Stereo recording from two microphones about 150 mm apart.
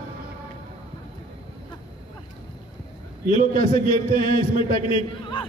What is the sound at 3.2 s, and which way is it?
A man's voice, 40° left (ahead or behind).